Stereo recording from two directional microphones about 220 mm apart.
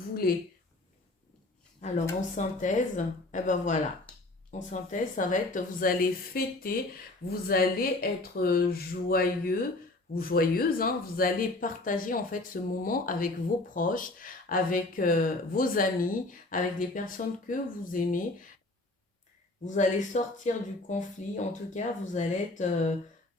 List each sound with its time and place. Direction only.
0.1 s a sound: 40° left (ahead or behind)
2.3 s speech: 35° left (ahead or behind)
19.6 s speech: 35° left (ahead or behind)